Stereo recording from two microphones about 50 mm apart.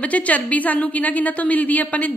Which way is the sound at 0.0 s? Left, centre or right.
Left.